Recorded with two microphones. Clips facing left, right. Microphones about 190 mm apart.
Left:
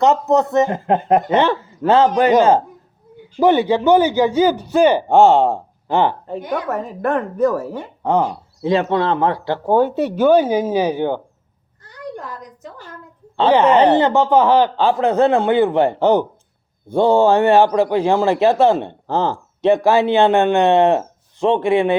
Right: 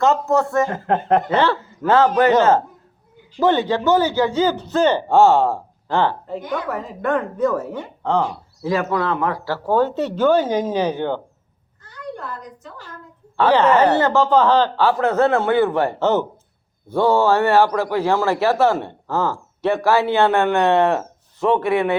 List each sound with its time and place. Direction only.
0.0 s a man's voice: 20° left (ahead or behind)
8.0 s a man's voice: 20° left (ahead or behind)
13.3 s a man's voice: 20° left (ahead or behind)